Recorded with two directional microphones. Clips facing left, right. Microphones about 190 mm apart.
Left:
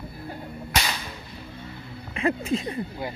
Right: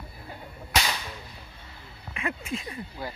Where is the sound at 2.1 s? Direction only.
35° left (ahead or behind).